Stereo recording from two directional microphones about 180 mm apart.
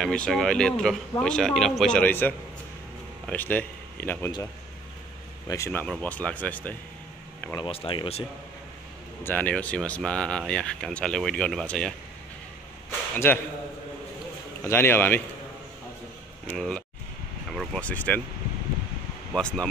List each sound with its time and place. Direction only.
0.0 s speech: 5° left (ahead or behind)
5.5 s speech: 15° left (ahead or behind)
7.5 s speech: 30° left (ahead or behind)
9.2 s speech: 10° left (ahead or behind)
13.1 s a man's voice: 10° left (ahead or behind)
14.6 s speech: 10° left (ahead or behind)
16.4 s speech: 5° left (ahead or behind)
19.3 s speech: 5° left (ahead or behind)